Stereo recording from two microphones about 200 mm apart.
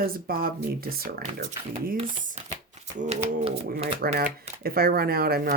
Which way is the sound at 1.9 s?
30° right (ahead or behind).